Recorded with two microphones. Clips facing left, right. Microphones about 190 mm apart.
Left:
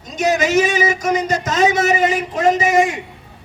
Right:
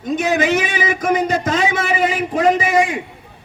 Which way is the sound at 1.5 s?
45° left (ahead or behind).